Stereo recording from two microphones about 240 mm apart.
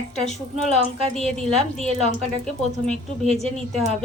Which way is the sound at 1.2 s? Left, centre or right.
Centre.